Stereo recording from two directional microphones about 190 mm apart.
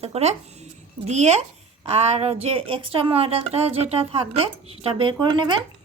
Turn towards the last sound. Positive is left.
turn(degrees=-25)  # may be behind; listen again after turning